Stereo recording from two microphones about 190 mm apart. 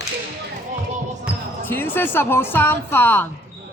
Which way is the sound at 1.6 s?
10° left (ahead or behind).